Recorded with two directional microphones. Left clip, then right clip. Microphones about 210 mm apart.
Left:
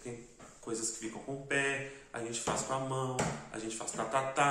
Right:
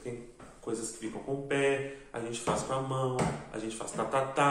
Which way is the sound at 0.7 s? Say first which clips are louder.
Right 2 dB; 5° left (ahead or behind).